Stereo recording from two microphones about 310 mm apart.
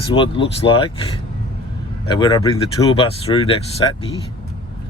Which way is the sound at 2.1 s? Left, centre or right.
Centre.